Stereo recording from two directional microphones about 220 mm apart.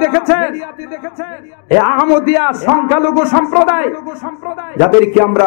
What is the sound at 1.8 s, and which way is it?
A man's voice, 20° left (ahead or behind).